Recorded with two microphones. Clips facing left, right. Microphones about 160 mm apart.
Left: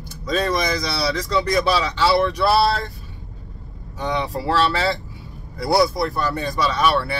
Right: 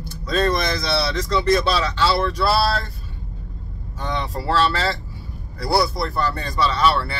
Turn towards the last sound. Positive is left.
turn(degrees=15)  # may be behind; listen again after turning